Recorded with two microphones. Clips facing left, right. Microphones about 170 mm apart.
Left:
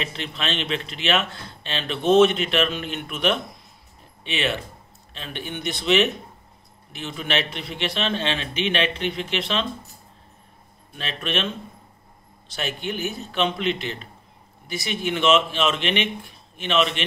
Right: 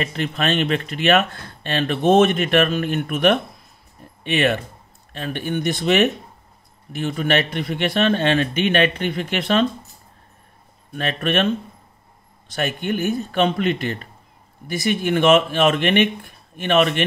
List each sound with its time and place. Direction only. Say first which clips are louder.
0.0 s speech: right 7 dB; 50° right (ahead or behind)
11.0 s speech: right 7 dB; 50° right (ahead or behind)
12.5 s speech: right 6 dB; 55° right (ahead or behind)